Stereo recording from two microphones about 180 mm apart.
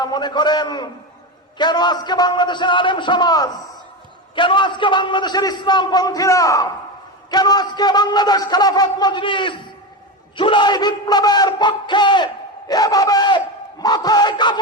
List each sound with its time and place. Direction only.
0.0 s speech: 25° left (ahead or behind)